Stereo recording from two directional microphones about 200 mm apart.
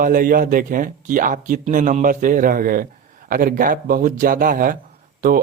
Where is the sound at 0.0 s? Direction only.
45° right (ahead or behind).